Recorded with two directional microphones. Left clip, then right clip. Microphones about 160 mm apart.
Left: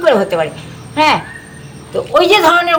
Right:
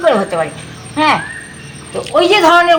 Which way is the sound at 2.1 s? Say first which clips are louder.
Even; 20° left (ahead or behind).